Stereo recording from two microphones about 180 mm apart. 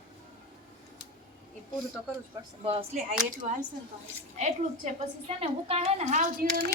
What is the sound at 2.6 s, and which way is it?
Speech, 30° right (ahead or behind).